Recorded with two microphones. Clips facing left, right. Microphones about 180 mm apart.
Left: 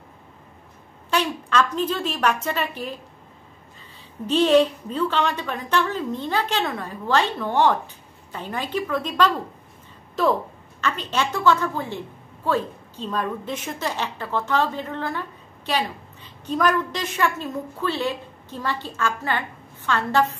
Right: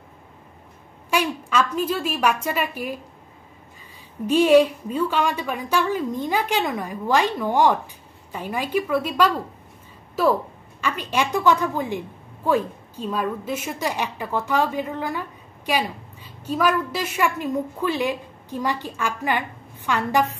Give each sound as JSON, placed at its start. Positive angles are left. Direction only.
{"t": 1.1, "sound": "a woman's voice", "side_deg": -10}
{"t": 4.3, "sound": "a woman's voice", "side_deg": -10}